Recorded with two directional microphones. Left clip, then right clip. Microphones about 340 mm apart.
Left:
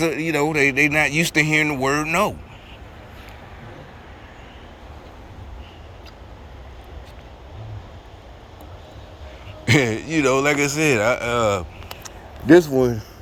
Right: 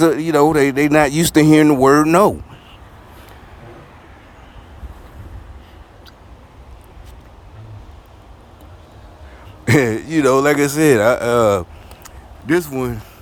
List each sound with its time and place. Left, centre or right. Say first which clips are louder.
0.0 s speech: right 8 dB; centre
9.6 s speech: right 3 dB; centre
12.7 s speech: left 4 dB; centre